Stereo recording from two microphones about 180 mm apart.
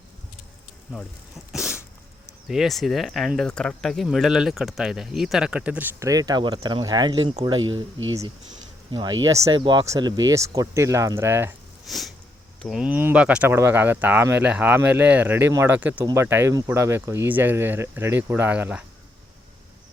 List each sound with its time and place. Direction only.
1.5 s sneeze: 5° right (ahead or behind)
2.5 s speech: centre (ahead or behind); by 7.6 s 30° right (ahead or behind)
8.9 s speech: 25° right (ahead or behind)
11.9 s speech: centre (ahead or behind)